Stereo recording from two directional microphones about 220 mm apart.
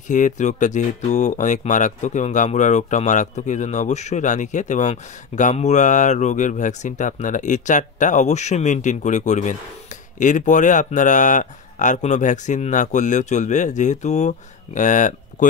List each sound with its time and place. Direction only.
0.1 s speech: 35° left (ahead or behind)